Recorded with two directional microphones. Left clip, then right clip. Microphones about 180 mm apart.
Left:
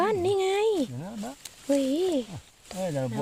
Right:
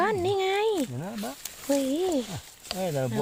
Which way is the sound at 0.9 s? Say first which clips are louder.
Right 3 dB; 55° right (ahead or behind).